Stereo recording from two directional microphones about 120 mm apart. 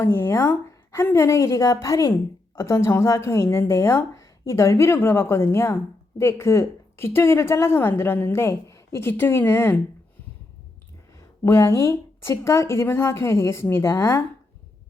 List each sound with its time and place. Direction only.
0.0 s speech: 20° left (ahead or behind)
11.4 s speech: 25° left (ahead or behind)